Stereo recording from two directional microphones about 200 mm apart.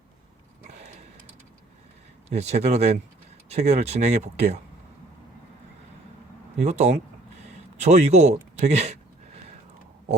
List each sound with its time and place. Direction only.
2.3 s speech: 35° right (ahead or behind)
6.6 s speech: 35° right (ahead or behind)